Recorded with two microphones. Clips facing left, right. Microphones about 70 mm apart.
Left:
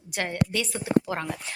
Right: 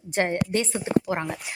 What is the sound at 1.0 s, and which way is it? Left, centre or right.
Speech, centre.